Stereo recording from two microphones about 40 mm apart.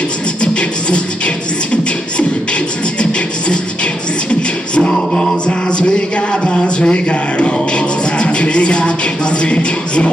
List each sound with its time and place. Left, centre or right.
0.4 s music: left